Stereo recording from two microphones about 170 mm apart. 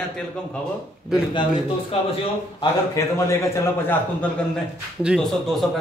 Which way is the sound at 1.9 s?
35° left (ahead or behind).